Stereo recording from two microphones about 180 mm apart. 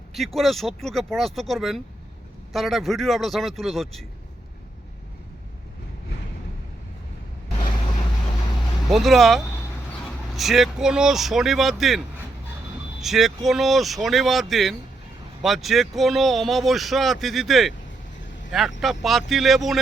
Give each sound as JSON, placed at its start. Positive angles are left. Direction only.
{"t": 0.3, "sound": "speech", "side_deg": 0}
{"t": 8.9, "sound": "speech", "side_deg": 0}